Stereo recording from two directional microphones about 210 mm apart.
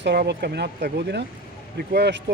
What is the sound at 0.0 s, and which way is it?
Speech, 55° right (ahead or behind).